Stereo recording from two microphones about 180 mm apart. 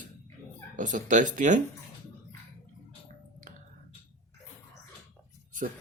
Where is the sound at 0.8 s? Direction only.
45° right (ahead or behind).